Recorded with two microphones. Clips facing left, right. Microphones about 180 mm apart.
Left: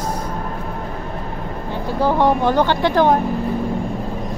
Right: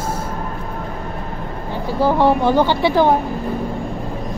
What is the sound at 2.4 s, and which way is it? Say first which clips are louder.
Music: right 1 dB; 10° right (ahead or behind).